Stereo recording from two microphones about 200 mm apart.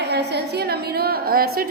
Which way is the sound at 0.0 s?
55° right (ahead or behind).